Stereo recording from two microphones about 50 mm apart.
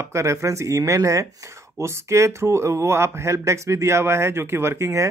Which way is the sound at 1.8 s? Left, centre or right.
Right.